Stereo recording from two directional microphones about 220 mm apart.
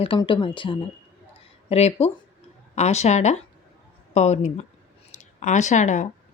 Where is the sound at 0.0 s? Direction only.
25° left (ahead or behind).